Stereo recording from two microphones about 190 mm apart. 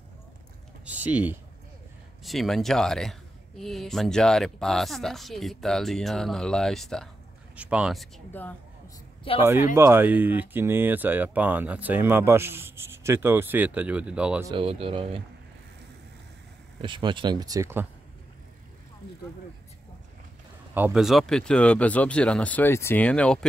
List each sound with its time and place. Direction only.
0.8 s speech: 10° right (ahead or behind)
8.3 s a sound: 10° left (ahead or behind)
9.4 s speech: 10° right (ahead or behind)
14.4 s speech: 25° right (ahead or behind)
16.8 s speech: 25° right (ahead or behind)
20.7 s speech: 5° right (ahead or behind)